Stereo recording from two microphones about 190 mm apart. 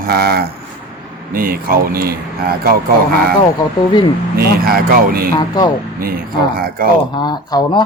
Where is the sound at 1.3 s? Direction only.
50° right (ahead or behind).